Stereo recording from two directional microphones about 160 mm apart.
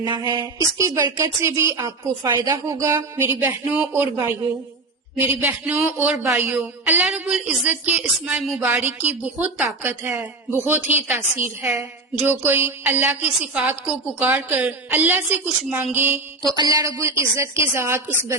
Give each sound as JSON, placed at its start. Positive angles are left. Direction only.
{"t": 0.0, "sound": "a woman's voice", "side_deg": -30}
{"t": 5.4, "sound": "speech", "side_deg": -10}
{"t": 16.4, "sound": "speech", "side_deg": -25}